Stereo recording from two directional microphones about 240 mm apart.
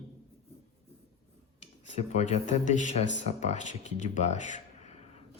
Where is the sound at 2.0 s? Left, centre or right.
Left.